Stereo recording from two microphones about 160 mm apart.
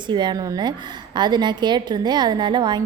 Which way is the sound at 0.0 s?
30° right (ahead or behind).